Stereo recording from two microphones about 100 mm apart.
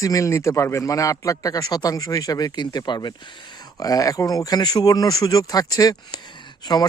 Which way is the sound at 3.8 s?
35° left (ahead or behind).